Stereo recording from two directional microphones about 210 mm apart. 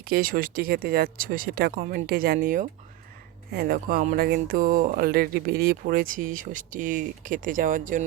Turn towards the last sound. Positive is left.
turn(degrees=-40)  # may be behind; listen again after turning